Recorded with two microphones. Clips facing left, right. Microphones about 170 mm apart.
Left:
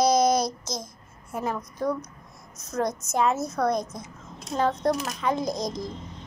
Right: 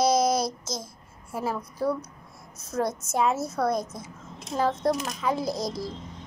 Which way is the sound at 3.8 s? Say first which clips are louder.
Left 1 dB; 25° right (ahead or behind).